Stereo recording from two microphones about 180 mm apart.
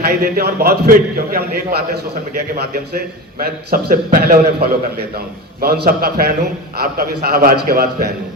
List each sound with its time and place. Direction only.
0.0 s a man's voice: 60° right (ahead or behind)
3.3 s a man's voice: 55° right (ahead or behind)